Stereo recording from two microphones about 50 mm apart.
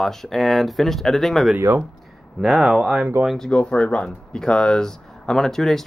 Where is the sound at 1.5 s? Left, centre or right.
Right.